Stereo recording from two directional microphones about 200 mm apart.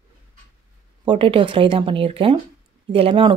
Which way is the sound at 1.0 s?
25° right (ahead or behind).